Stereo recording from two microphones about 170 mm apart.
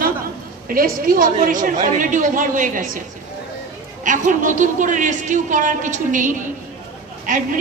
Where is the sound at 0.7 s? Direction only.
55° right (ahead or behind).